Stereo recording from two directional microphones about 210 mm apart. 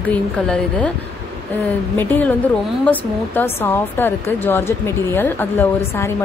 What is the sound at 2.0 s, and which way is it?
A woman's voice, 10° left (ahead or behind).